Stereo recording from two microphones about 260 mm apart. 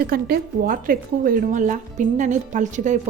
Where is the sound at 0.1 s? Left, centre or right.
Right.